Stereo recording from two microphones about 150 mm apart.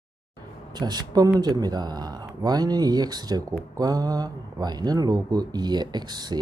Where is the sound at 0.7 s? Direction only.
25° right (ahead or behind).